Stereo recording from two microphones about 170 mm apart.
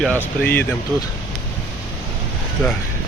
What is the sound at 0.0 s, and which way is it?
Speech, 10° left (ahead or behind).